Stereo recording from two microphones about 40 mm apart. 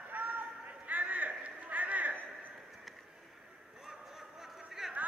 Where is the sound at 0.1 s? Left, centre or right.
Right.